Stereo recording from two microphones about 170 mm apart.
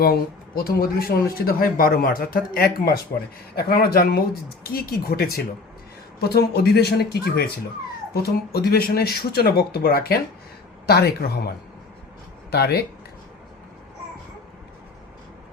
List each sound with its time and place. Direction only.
0.0 s speech: 65° left (ahead or behind)
12.5 s speech: 70° left (ahead or behind)